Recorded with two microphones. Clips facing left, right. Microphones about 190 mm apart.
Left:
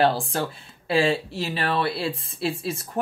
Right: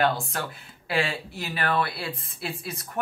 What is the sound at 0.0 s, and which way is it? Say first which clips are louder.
Speech: left 4 dB; 30° left (ahead or behind).